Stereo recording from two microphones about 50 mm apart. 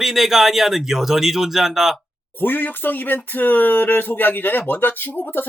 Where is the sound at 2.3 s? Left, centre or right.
Left.